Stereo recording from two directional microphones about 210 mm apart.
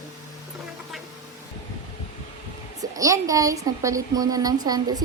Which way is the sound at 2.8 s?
15° right (ahead or behind).